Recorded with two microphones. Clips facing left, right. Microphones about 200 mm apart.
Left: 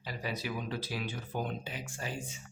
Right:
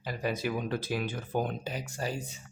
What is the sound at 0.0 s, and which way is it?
Speech, 50° right (ahead or behind).